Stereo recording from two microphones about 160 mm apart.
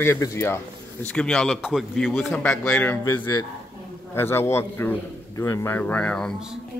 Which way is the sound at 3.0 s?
25° left (ahead or behind).